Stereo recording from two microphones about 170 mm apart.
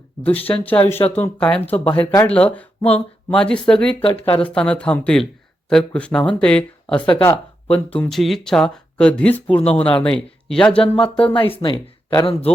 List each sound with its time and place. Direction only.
0.4 s speech: 10° left (ahead or behind)
11.3 s speech: 30° left (ahead or behind)